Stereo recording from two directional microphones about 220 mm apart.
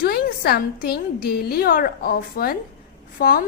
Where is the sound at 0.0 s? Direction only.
45° left (ahead or behind).